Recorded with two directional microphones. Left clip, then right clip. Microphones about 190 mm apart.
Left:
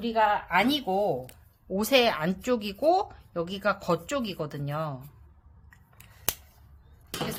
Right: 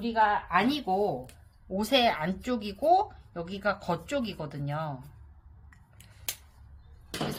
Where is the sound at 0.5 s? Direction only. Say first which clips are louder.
Left 2 dB; 20° left (ahead or behind).